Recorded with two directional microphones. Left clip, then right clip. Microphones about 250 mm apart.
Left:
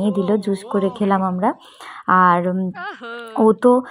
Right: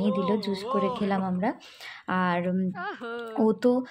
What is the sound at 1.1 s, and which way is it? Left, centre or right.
Speech, centre.